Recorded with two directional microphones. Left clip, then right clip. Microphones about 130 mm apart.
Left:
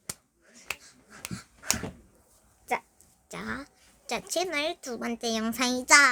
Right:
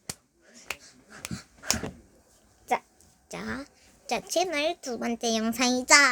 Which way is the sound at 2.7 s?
5° left (ahead or behind).